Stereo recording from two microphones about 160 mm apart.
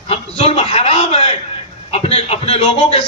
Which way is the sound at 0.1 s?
40° left (ahead or behind).